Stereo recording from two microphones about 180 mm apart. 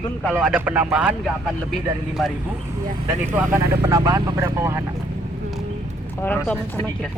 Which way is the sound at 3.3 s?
15° right (ahead or behind).